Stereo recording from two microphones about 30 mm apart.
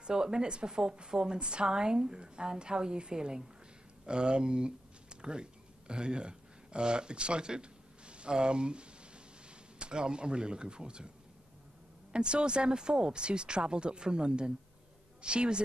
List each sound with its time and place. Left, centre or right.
0.0 s a woman's voice: right
12.1 s speech: right